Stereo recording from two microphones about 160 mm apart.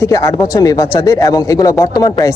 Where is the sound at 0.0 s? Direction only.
20° left (ahead or behind).